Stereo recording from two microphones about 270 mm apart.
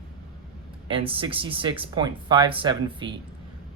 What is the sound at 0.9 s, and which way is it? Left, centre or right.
Speech, centre.